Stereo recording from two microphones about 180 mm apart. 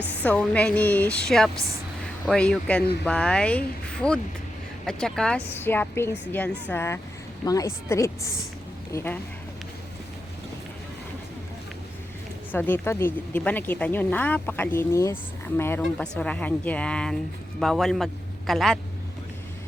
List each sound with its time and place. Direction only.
0.3 s speech: 5° left (ahead or behind)
12.5 s a man's voice: 10° left (ahead or behind)